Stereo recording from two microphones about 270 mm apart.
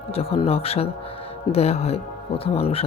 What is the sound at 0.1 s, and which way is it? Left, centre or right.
Speech, left.